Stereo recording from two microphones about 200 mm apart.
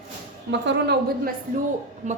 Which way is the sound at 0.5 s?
60° right (ahead or behind).